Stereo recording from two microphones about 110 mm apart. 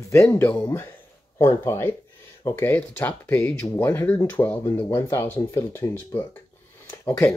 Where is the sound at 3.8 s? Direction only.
25° left (ahead or behind).